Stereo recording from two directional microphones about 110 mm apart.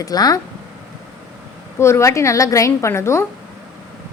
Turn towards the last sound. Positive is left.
turn(degrees=25)  # may be behind; listen again after turning